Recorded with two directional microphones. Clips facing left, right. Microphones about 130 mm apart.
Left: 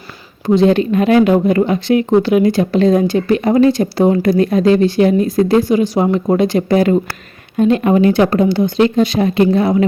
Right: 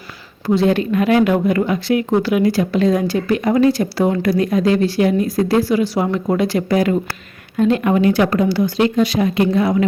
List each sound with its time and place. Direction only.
0.4 s speech: 20° left (ahead or behind)